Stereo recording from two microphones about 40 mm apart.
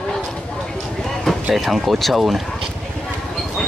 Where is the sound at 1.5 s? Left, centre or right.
Centre.